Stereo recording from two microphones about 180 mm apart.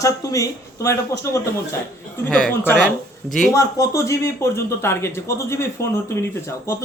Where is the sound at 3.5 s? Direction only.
15° left (ahead or behind).